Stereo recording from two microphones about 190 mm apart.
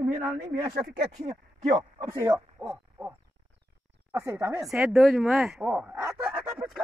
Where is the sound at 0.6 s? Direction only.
55° right (ahead or behind).